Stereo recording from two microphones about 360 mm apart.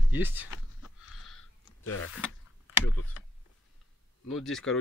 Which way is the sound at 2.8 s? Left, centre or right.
Left.